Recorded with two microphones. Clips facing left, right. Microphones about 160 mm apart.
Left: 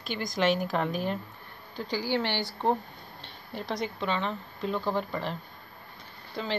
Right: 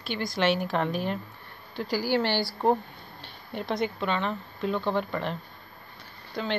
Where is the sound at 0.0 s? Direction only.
45° left (ahead or behind).